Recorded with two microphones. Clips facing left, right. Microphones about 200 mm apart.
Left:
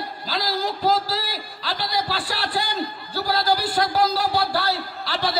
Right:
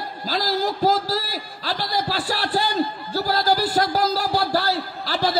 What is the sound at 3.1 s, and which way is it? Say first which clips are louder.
A man's voice: right 2 dB; 45° right (ahead or behind).